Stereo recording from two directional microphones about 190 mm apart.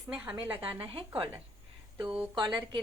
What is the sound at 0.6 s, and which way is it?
Speech, 25° right (ahead or behind).